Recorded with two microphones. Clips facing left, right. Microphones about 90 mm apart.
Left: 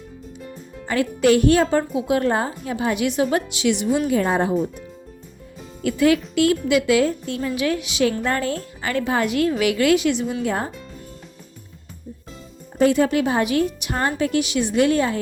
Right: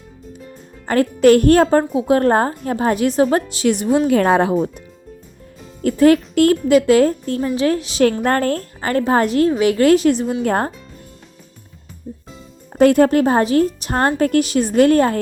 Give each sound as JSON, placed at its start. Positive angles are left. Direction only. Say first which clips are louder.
{"t": 0.9, "sound": "a woman's voice", "louder": "right 5 dB", "side_deg": -45}
{"t": 4.1, "sound": "speech", "louder": "right 5 dB", "side_deg": -75}
{"t": 5.8, "sound": "a woman's voice", "louder": "right 5 dB", "side_deg": -40}
{"t": 8.2, "sound": "a woman's voice", "louder": "right 5 dB", "side_deg": -50}
{"t": 10.4, "sound": "a woman's voice", "louder": "right 7 dB", "side_deg": -55}
{"t": 12.8, "sound": "a woman's voice", "louder": "right 5 dB", "side_deg": -50}